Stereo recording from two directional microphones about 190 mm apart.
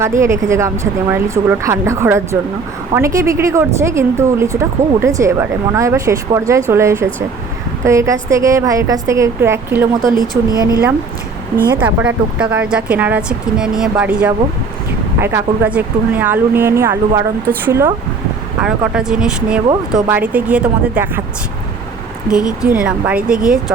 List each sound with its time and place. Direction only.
0.2 s a woman's voice: 15° right (ahead or behind)
10.0 s speech: 45° right (ahead or behind)
11.8 s a woman's voice: 10° right (ahead or behind)
18.6 s a woman's voice: 5° right (ahead or behind)
22.3 s speech: 5° right (ahead or behind)